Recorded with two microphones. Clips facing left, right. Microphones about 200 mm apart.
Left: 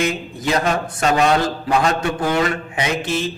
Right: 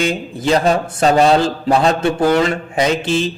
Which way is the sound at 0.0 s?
30° right (ahead or behind).